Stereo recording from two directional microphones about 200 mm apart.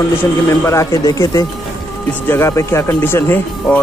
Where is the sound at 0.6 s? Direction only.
15° left (ahead or behind).